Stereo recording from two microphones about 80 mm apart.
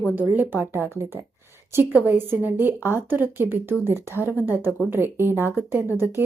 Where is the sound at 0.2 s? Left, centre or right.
Right.